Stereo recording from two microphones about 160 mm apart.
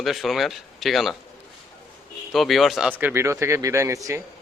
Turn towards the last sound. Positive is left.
turn(degrees=-20)  # may be behind; listen again after turning